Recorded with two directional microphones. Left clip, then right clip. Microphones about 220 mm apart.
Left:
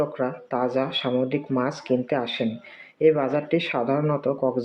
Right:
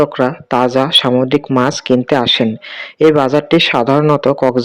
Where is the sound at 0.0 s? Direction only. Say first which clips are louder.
Right 12 dB; 45° right (ahead or behind).